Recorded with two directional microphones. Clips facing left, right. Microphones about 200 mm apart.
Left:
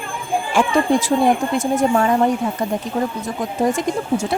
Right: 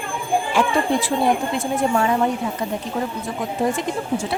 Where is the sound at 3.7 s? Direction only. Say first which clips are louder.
Left 3 dB; 45° left (ahead or behind).